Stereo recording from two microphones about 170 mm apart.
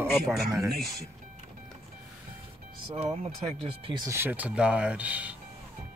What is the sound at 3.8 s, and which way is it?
Speech, 25° right (ahead or behind).